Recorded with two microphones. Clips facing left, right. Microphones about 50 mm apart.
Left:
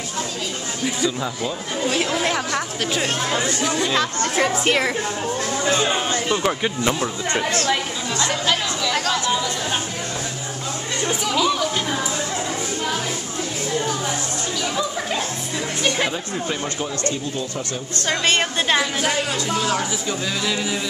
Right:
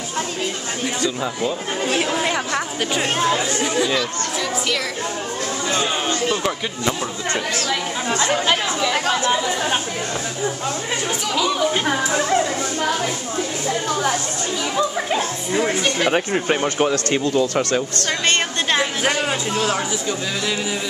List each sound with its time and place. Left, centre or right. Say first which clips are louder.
0.8 s a woman's voice: even; centre
3.6 s speech: right 2 dB; centre
3.9 s speech: left 2 dB; left
5.9 s speech: even; centre
6.6 s speech: left 2 dB; centre
8.1 s chatter: right 3 dB; right
11.1 s a woman's voice: left 2 dB; centre
14.8 s speech: right 6 dB; centre
16.1 s speech: right 7 dB; right
16.8 s speech: right 6 dB; right
18.2 s a woman's voice: even; centre
18.8 s speech: right 1 dB; right
19.7 s speech: right 1 dB; centre